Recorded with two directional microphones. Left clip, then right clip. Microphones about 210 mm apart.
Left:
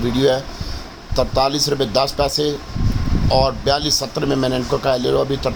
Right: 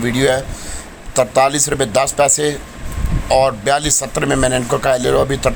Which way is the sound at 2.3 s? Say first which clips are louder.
Right 3 dB; 40° right (ahead or behind).